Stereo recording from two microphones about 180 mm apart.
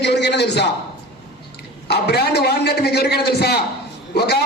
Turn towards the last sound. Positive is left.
turn(degrees=65)  # may be behind; listen again after turning